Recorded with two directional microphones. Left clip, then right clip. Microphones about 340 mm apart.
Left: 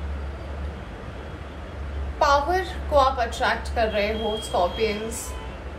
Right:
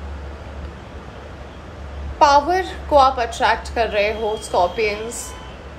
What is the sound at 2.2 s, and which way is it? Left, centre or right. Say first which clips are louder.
A woman's voice: right 6 dB; right.